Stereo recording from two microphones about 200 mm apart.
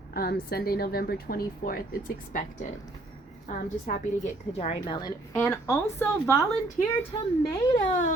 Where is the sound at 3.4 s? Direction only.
40° left (ahead or behind).